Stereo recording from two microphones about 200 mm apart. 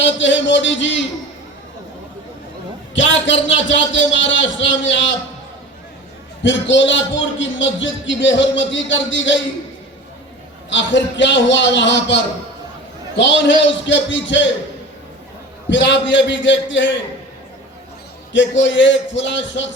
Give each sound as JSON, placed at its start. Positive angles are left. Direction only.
{"t": 0.0, "sound": "a man's voice", "side_deg": 65}
{"t": 2.9, "sound": "a man's voice", "side_deg": 65}
{"t": 6.4, "sound": "a man's voice", "side_deg": 65}
{"t": 10.7, "sound": "a man's voice", "side_deg": 65}
{"t": 15.7, "sound": "a man's voice", "side_deg": 65}
{"t": 18.3, "sound": "a man's voice", "side_deg": 65}